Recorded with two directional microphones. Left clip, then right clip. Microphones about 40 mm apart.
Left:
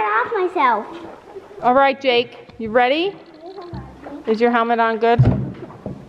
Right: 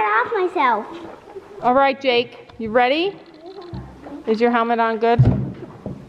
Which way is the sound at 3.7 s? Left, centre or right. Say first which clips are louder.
Left 2 dB; left.